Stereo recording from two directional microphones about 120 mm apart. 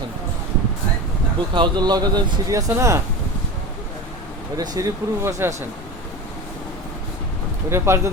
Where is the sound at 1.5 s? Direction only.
40° right (ahead or behind).